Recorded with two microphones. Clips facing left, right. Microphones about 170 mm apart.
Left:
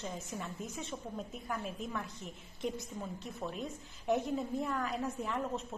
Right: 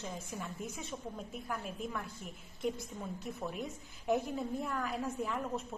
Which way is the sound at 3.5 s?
5° right (ahead or behind).